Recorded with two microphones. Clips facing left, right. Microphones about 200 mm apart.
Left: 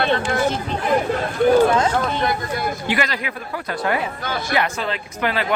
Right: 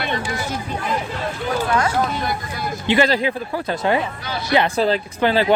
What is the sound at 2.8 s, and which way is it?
Speech, 30° right (ahead or behind).